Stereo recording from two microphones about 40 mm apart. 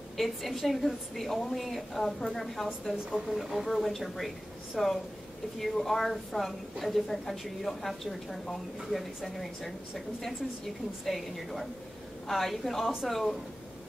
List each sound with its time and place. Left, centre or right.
0.2 s a woman's voice: centre
3.1 s a woman's voice: centre